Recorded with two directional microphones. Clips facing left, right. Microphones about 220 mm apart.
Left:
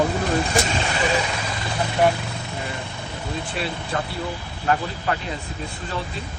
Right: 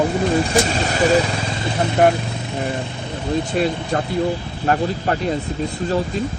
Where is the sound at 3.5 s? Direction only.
45° right (ahead or behind).